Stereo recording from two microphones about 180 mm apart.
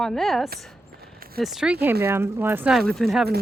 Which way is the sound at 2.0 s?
15° right (ahead or behind).